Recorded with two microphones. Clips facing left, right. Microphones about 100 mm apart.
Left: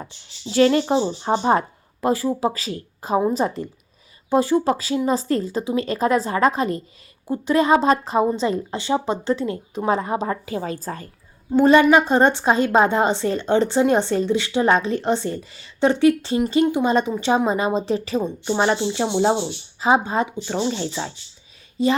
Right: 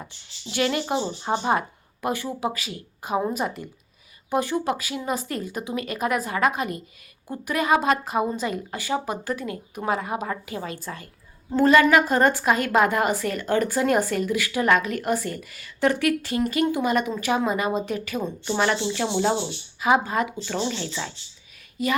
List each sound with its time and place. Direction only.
0.5 s a woman's voice: 35° left (ahead or behind)
11.5 s a woman's voice: 20° left (ahead or behind)